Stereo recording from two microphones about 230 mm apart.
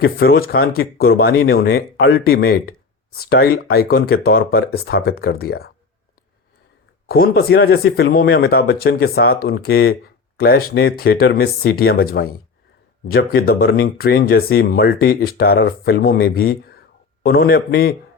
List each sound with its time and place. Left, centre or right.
0.0 s speech: left
7.1 s speech: left